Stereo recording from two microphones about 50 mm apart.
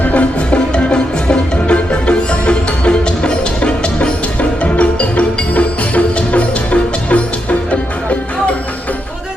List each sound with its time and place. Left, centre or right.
0.0 s music: left